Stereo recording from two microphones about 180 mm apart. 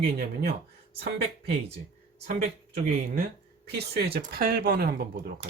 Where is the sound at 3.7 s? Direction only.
65° right (ahead or behind).